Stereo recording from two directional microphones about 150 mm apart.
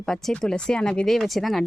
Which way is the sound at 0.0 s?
5° left (ahead or behind).